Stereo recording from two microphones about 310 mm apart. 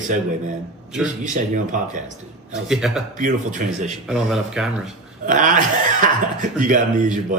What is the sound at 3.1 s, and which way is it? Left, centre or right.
Speech, right.